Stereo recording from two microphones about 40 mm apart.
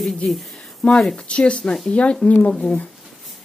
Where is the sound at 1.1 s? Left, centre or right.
Left.